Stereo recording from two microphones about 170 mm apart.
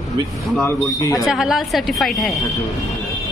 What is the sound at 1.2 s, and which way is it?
A woman's voice, centre (ahead or behind).